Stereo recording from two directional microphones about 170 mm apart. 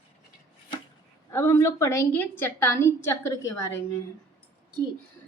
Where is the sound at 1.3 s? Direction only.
15° left (ahead or behind).